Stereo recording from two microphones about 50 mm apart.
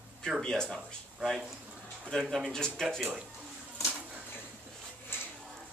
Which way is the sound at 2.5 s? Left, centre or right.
Centre.